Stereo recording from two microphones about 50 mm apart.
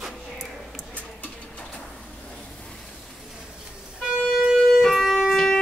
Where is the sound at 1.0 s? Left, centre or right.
Left.